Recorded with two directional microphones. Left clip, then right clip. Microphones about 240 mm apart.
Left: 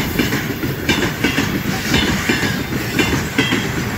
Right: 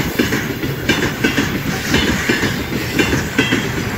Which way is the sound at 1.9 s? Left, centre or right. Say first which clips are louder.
Right 1 dB; left.